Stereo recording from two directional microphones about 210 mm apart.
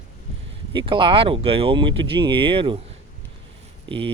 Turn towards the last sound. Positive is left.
turn(degrees=-25)  # may be behind; listen again after turning